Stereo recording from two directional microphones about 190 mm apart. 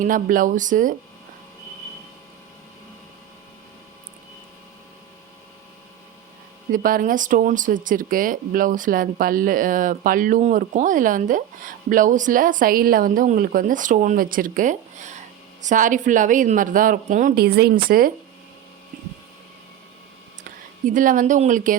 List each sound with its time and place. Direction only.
0.0 s speech: 45° right (ahead or behind)
6.7 s speech: 45° right (ahead or behind)
20.8 s speech: 45° right (ahead or behind)